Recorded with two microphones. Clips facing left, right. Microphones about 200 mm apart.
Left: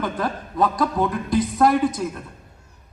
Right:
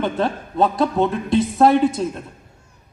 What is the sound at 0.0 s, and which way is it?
Speech, 25° right (ahead or behind).